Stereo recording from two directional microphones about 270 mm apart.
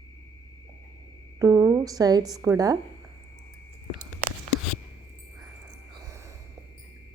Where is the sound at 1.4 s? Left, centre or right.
Centre.